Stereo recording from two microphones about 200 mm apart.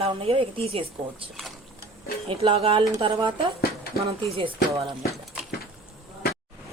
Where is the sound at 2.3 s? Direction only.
25° right (ahead or behind).